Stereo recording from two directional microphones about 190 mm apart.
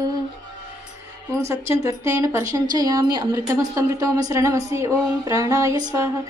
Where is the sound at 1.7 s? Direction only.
15° right (ahead or behind).